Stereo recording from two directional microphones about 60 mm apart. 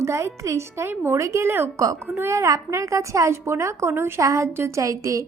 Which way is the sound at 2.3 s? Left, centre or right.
Right.